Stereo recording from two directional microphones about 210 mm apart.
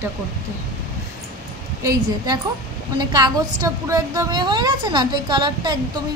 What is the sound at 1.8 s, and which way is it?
A woman's voice, 15° right (ahead or behind).